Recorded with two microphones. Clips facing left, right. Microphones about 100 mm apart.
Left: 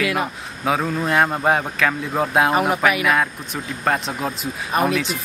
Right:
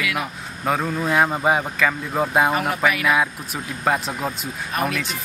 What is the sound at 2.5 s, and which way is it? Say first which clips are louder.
Speech: left 4 dB; 20° left (ahead or behind).